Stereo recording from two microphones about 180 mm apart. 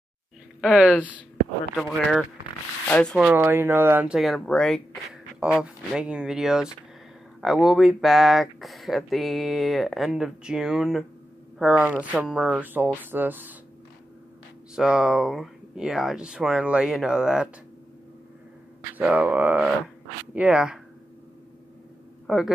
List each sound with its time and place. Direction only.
0.6 s speech: 5° right (ahead or behind)
3.3 s speech: 10° right (ahead or behind)
14.8 s speech: 5° right (ahead or behind)
18.9 s speech: 10° right (ahead or behind)
22.2 s a sound: centre (ahead or behind)